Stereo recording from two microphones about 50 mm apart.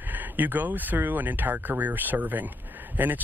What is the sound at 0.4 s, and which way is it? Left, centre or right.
Speech, right.